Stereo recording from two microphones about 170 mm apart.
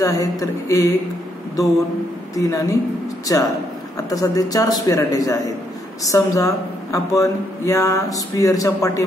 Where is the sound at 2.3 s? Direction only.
20° left (ahead or behind).